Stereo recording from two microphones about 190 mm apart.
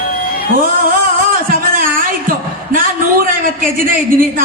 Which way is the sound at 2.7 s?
50° right (ahead or behind).